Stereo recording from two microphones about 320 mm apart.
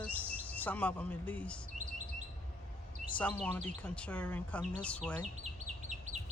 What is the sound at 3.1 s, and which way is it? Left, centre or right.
Speech, centre.